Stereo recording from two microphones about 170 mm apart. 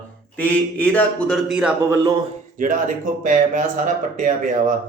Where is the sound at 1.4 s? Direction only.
5° right (ahead or behind).